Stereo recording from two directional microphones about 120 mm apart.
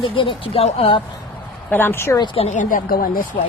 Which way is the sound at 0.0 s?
45° left (ahead or behind).